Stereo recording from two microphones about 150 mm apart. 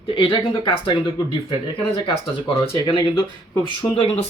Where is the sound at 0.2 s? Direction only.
35° left (ahead or behind).